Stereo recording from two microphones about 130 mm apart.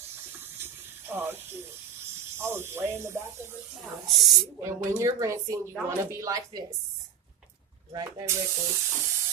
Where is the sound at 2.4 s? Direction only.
20° right (ahead or behind).